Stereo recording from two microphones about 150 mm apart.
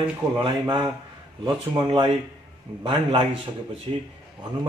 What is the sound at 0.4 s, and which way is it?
A man's voice, 35° right (ahead or behind).